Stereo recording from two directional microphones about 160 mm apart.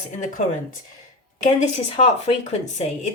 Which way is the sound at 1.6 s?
40° left (ahead or behind).